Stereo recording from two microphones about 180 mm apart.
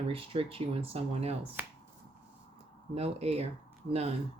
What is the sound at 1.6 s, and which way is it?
Speech, 10° right (ahead or behind).